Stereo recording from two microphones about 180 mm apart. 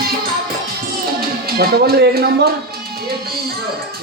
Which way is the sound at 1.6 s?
60° right (ahead or behind).